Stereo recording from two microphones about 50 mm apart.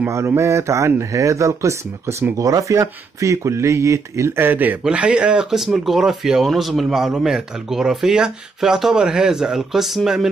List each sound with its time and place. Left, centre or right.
0.3 s speech: right
4.4 s speech: right
4.8 s speech: right
5.6 s speech: centre